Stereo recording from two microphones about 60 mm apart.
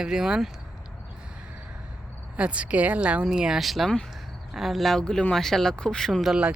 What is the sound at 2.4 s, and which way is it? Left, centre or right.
Speech, right.